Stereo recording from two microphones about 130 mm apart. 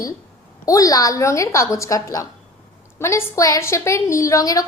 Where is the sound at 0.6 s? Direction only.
25° left (ahead or behind).